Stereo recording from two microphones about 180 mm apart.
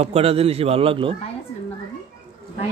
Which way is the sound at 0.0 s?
35° right (ahead or behind).